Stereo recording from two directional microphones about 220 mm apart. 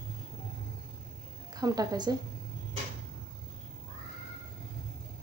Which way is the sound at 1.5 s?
15° right (ahead or behind).